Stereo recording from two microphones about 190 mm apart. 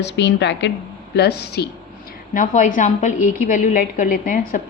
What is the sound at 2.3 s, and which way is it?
A woman's voice, 40° left (ahead or behind).